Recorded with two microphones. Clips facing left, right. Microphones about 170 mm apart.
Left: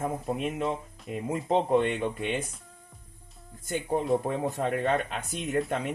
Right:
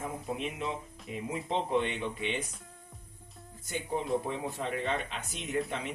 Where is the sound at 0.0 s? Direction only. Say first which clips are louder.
Left 6 dB; 50° left (ahead or behind).